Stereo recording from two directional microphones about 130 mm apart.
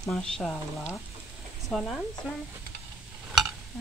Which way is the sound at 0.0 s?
5° left (ahead or behind).